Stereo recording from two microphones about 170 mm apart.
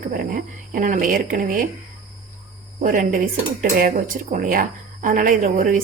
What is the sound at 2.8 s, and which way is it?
Speech, 50° right (ahead or behind).